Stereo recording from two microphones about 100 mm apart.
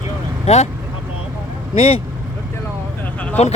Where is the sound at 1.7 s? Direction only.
85° left.